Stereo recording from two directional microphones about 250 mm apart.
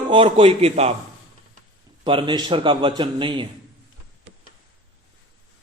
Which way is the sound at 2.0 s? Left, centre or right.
Centre.